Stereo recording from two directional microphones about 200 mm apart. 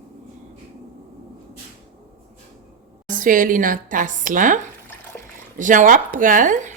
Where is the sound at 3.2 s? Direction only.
45° right (ahead or behind).